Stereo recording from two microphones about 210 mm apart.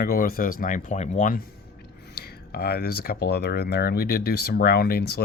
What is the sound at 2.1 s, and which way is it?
Speech, 50° left (ahead or behind).